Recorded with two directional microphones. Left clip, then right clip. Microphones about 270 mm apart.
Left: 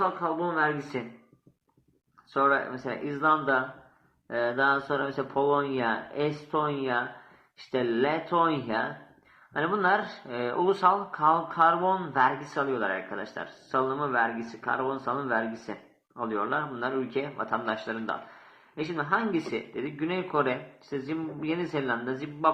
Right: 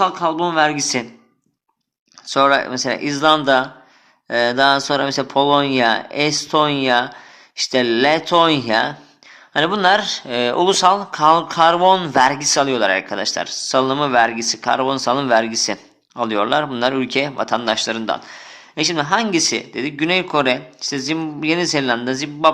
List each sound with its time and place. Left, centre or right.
0.2 s speech: right
2.3 s speech: right